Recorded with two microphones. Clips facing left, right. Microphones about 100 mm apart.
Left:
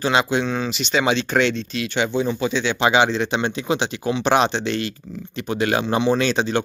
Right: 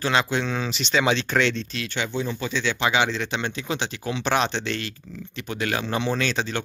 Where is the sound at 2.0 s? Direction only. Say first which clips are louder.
Left 7 dB; 20° left (ahead or behind).